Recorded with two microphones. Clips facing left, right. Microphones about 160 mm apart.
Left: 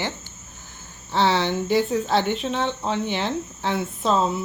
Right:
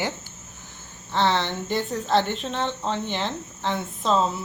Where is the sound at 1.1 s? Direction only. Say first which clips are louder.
Left 2 dB; 5° left (ahead or behind).